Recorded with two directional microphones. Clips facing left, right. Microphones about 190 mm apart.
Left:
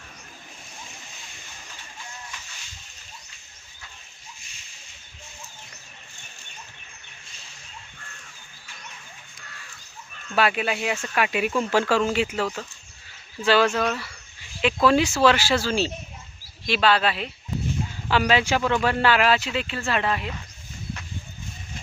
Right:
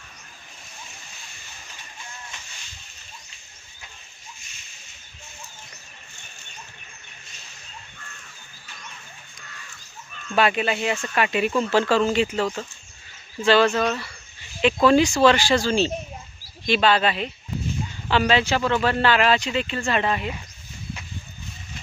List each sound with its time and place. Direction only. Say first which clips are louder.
10.3 s a man's voice: right 2 dB; 5° left (ahead or behind)